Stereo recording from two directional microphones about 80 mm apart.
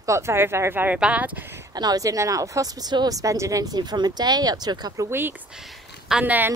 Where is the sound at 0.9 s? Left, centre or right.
Centre.